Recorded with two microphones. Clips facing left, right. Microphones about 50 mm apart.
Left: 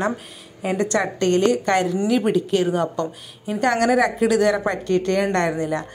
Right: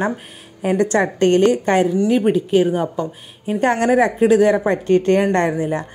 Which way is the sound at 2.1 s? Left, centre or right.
Centre.